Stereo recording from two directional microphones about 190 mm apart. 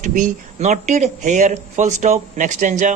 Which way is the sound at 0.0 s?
40° right (ahead or behind).